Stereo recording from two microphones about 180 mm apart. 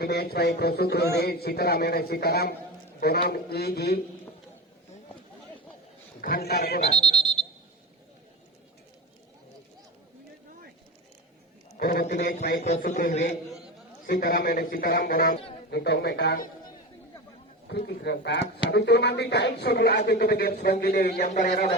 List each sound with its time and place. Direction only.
0.0 s speech: 60° left (ahead or behind)
6.2 s speech: 55° left (ahead or behind)
11.8 s a man's voice: 55° left (ahead or behind)
14.1 s speech: 55° left (ahead or behind)
17.7 s speech: 70° left (ahead or behind); by 21.7 s 40° left (ahead or behind)